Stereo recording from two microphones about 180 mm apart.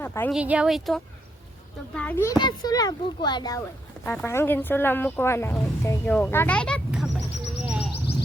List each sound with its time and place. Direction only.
0.0 s speech: 10° left (ahead or behind)
0.3 s a child's voice: 5° right (ahead or behind); by 3.6 s 20° left (ahead or behind)
4.0 s speech: 10° left (ahead or behind)
7.7 s a sound: 5° right (ahead or behind)